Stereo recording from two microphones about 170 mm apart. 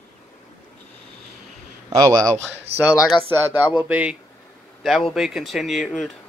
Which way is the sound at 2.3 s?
40° right (ahead or behind).